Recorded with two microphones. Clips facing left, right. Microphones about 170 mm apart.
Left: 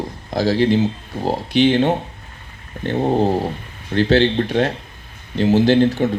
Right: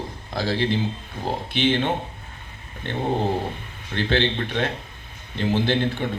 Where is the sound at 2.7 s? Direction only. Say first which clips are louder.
Left 9 dB; 45° left (ahead or behind).